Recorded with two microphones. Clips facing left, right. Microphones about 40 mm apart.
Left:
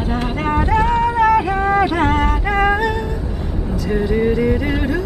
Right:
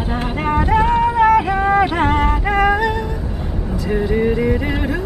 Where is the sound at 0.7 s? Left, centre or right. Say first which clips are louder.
Right 2 dB; centre.